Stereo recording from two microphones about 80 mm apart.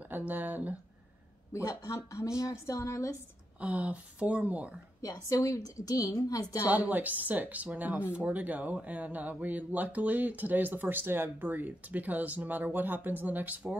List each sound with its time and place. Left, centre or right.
0.1 s speech: right
1.5 s a woman's voice: left
3.6 s speech: centre
5.0 s a woman's voice: left
6.6 s speech: centre